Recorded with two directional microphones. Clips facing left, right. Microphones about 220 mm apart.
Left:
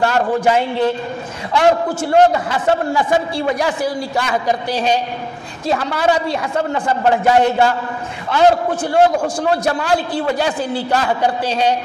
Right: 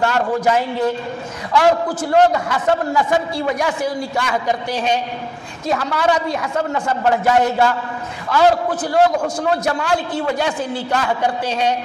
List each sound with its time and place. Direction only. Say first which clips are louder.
0.0 s a man's voice: left 2 dB; 30° left (ahead or behind)